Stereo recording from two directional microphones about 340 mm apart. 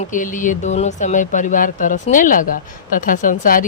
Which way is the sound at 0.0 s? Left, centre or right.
Left.